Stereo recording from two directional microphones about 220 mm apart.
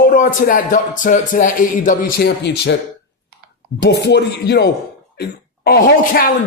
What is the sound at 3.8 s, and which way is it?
Speech, 50° left (ahead or behind).